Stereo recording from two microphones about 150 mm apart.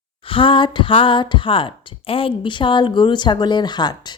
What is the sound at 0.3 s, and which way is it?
Speech, 35° left (ahead or behind).